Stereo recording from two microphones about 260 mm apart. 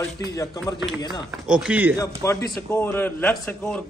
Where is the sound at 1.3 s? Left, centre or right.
Centre.